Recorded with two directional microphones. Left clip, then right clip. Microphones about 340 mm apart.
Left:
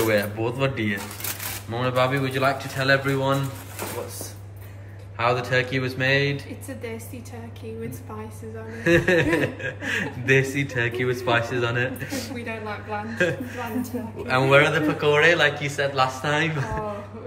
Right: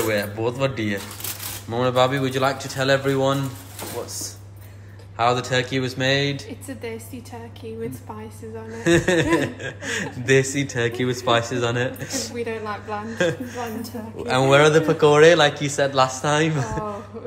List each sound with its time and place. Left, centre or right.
0.0 s a man's voice: centre
5.1 s a man's voice: centre
8.8 s a man's voice: centre
12.4 s speech: right
13.1 s a man's voice: centre